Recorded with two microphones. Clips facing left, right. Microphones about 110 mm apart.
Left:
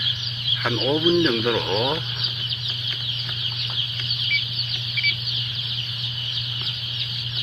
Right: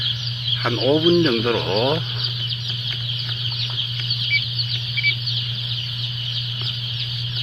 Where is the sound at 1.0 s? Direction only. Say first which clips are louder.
Right 1 dB; 30° right (ahead or behind).